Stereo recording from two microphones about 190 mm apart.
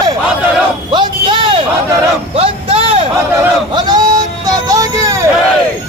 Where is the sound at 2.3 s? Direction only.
30° right (ahead or behind).